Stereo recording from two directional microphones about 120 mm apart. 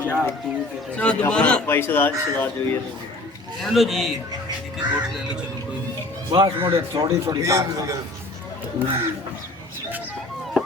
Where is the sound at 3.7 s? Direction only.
Centre (ahead or behind).